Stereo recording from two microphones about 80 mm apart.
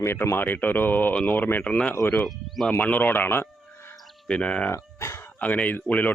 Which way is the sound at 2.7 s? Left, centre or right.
Centre.